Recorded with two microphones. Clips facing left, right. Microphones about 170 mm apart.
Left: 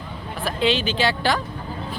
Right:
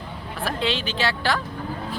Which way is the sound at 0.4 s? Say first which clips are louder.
Left 4 dB; centre (ahead or behind).